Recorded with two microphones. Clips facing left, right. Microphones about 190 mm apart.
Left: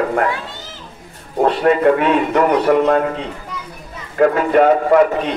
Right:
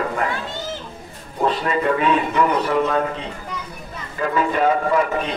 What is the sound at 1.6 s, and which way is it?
A man's voice, 60° left (ahead or behind).